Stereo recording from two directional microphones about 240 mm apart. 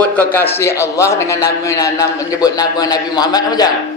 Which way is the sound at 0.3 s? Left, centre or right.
Centre.